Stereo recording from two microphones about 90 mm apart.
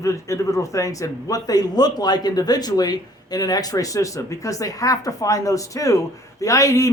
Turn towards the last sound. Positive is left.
turn(degrees=35)  # may be behind; listen again after turning